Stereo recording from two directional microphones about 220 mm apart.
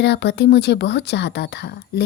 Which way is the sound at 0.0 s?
50° left (ahead or behind).